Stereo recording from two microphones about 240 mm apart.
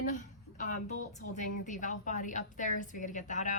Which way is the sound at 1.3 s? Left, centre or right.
Left.